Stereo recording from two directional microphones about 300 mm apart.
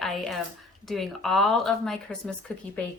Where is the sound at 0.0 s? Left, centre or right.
Centre.